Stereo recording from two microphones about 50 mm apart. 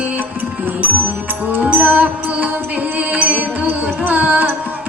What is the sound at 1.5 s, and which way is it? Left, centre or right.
Music, right.